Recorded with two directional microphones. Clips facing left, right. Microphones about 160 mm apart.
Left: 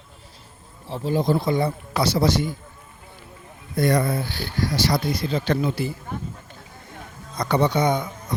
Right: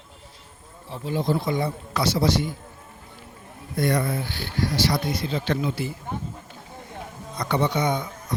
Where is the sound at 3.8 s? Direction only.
40° left (ahead or behind).